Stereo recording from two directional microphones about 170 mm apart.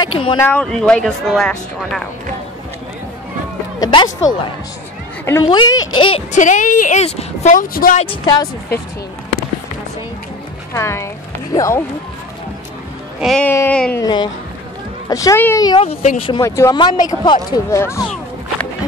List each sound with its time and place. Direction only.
0.0 s speech: 30° left (ahead or behind)
0.4 s speech: 10° left (ahead or behind)
3.8 s speech: 25° left (ahead or behind)
5.5 s speech: 25° left (ahead or behind)
6.3 s a woman's voice: 45° left (ahead or behind)
7.5 s a woman's voice: 55° left (ahead or behind)
8.0 s speech: 30° left (ahead or behind)
10.7 s speech: 15° left (ahead or behind)
13.2 s speech: centre (ahead or behind)
13.5 s speech: 10° left (ahead or behind)
14.0 s speech: 25° left (ahead or behind)
15.8 s speech: 40° left (ahead or behind)
16.4 s speech: 20° left (ahead or behind)